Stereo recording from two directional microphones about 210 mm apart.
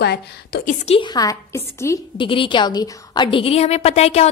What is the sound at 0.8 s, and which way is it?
A woman's voice, 25° left (ahead or behind).